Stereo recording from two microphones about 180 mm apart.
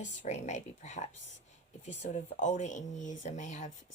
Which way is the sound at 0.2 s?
40° left (ahead or behind).